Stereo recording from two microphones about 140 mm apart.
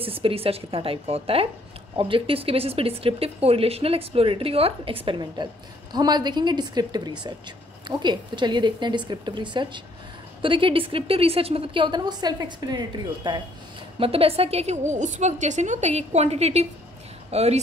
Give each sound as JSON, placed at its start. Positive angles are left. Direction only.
{"t": 0.0, "sound": "a woman's voice", "side_deg": -40}
{"t": 13.9, "sound": "speech", "side_deg": -40}